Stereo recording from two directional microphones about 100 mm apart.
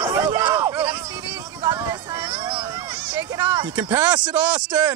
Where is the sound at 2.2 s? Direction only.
65° right (ahead or behind).